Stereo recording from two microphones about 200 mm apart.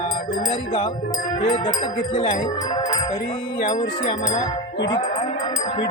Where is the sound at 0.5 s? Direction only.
20° left (ahead or behind).